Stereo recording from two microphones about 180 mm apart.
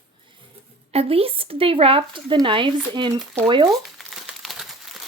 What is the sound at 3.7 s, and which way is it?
Crumpling, centre (ahead or behind).